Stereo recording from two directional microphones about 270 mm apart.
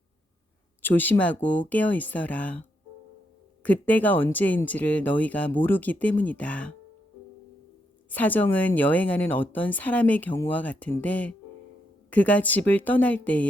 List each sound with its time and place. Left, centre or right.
0.8 s speech: centre
8.1 s speech: centre